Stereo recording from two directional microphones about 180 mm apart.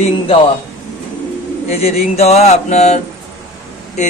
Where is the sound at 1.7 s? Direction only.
35° left (ahead or behind).